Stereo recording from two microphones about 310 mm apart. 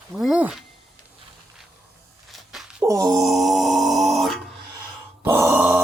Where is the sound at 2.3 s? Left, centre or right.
Centre.